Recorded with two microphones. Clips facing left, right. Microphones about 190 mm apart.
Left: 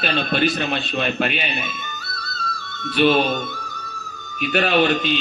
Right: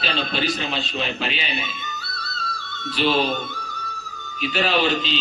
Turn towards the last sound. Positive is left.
turn(degrees=55)  # may be behind; listen again after turning